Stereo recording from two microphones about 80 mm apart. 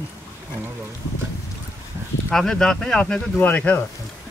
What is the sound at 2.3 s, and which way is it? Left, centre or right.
Speech, centre.